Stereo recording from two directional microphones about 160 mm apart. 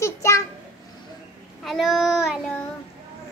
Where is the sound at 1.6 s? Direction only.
Centre (ahead or behind).